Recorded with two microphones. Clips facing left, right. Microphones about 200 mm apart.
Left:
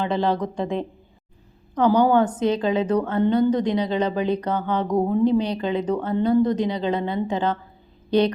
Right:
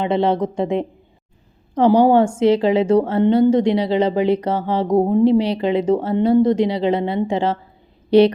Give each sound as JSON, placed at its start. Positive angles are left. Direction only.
{"t": 0.0, "sound": "a woman's voice", "side_deg": -25}